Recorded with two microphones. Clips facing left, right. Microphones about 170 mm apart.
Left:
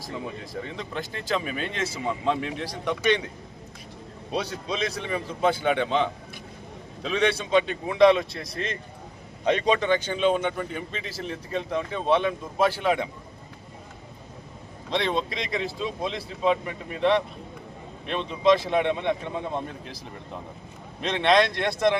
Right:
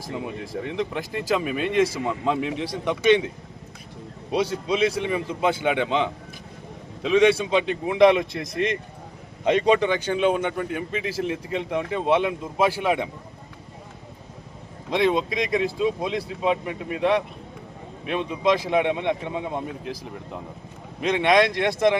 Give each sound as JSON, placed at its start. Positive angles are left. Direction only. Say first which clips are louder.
{"t": 0.1, "sound": "speech", "louder": "right 4 dB", "side_deg": -15}
{"t": 4.7, "sound": "speech", "louder": "right 5 dB", "side_deg": -10}
{"t": 11.0, "sound": "speech", "louder": "right 8 dB", "side_deg": -65}
{"t": 11.3, "sound": "speech", "louder": "right 3 dB", "side_deg": -10}
{"t": 14.8, "sound": "speech", "louder": "right 5 dB", "side_deg": -10}
{"t": 21.0, "sound": "speech", "louder": "right 2 dB", "side_deg": -10}